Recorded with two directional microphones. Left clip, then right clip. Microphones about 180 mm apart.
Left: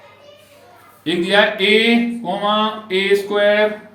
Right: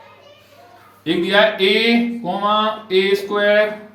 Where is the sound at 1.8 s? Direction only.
30° left (ahead or behind).